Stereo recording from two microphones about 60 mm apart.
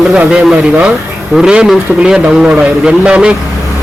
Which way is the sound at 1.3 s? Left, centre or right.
Right.